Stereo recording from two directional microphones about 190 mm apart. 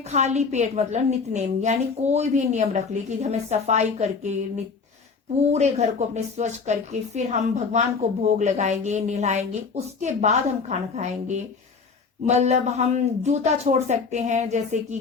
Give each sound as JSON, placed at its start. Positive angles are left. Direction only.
{"t": 0.0, "sound": "a woman's voice", "side_deg": -35}
{"t": 5.5, "sound": "a woman's voice", "side_deg": -35}